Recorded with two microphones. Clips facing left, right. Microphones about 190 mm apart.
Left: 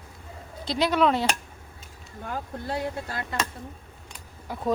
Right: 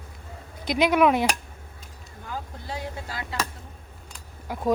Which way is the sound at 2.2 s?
60° left (ahead or behind).